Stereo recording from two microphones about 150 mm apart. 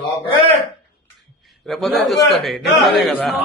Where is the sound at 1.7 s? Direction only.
Centre (ahead or behind).